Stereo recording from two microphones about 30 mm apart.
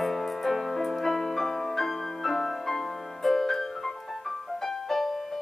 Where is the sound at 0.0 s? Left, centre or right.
Centre.